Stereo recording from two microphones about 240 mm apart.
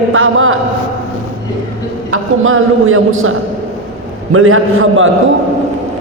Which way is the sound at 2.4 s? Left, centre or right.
Right.